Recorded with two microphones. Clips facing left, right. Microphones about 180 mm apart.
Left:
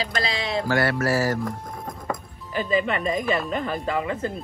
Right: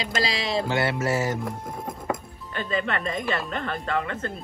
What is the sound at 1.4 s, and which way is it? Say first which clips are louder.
Speech: left 1 dB; 5° right (ahead or behind).